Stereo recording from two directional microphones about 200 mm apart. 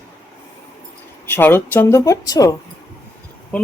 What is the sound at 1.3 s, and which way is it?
Speech, 10° left (ahead or behind).